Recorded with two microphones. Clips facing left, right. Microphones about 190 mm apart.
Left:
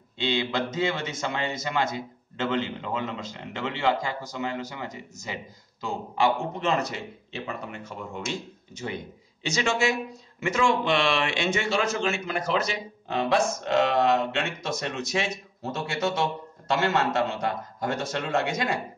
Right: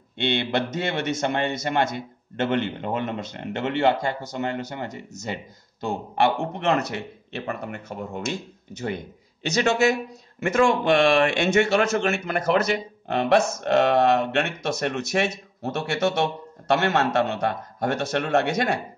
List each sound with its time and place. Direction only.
0.2 s a man's voice: 65° right (ahead or behind)
8.0 s speech: 40° right (ahead or behind)
8.7 s a man's voice: 60° right (ahead or behind)